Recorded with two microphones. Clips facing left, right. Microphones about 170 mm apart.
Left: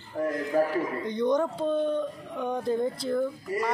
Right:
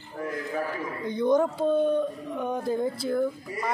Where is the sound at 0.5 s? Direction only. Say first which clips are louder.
Left 7 dB; 35° left (ahead or behind).